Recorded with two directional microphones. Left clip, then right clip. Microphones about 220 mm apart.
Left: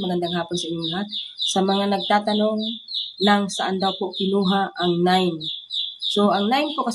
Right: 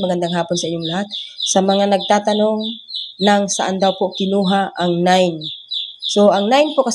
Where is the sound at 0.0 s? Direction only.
25° right (ahead or behind).